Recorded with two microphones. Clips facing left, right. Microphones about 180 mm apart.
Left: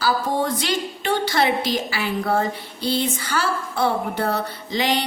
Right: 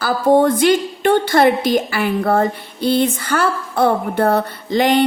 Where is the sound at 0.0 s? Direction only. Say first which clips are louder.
Right 9 dB; 55° right (ahead or behind).